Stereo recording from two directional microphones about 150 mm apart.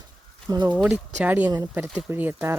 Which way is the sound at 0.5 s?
30° right (ahead or behind).